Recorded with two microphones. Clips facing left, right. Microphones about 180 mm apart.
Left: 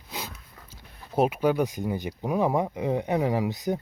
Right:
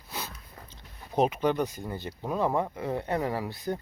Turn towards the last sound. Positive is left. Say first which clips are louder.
# left 5 dB
turn(degrees=15)  # may be behind; listen again after turning